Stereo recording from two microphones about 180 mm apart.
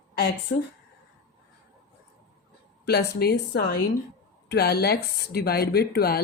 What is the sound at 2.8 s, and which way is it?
Speech, 65° left (ahead or behind).